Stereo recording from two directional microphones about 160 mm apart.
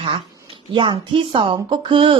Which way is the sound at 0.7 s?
35° right (ahead or behind).